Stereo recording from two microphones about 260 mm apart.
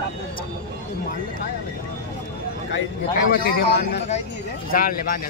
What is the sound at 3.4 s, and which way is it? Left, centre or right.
A man's voice, left.